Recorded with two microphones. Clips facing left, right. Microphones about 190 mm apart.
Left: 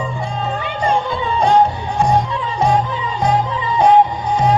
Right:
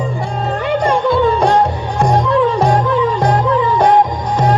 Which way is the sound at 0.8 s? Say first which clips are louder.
Right 5 dB; 75° right (ahead or behind).